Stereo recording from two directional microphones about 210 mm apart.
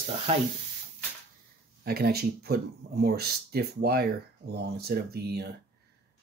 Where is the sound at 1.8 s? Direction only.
45° right (ahead or behind).